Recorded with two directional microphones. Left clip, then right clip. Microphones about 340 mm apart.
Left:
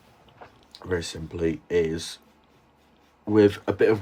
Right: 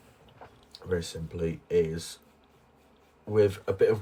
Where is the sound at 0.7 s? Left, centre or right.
Left.